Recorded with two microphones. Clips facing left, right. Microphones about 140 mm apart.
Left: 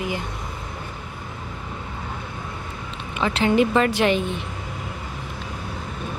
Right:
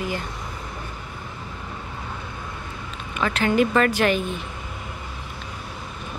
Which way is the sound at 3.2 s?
25° left (ahead or behind).